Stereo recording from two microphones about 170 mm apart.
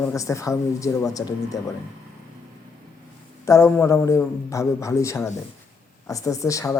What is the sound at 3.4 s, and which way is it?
A man's voice, 15° left (ahead or behind).